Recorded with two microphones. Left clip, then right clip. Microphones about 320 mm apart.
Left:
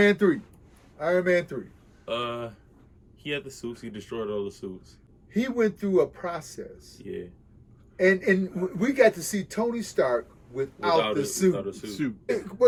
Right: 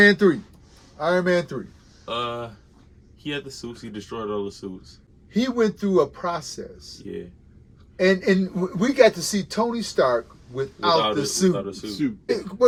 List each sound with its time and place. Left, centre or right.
0.0 s a man's voice: centre
2.0 s a man's voice: centre
7.0 s speech: centre
7.9 s a man's voice: centre
11.0 s speech: centre